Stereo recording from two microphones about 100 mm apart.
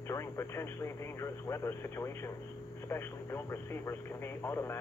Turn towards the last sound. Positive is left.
turn(degrees=25)  # may be behind; listen again after turning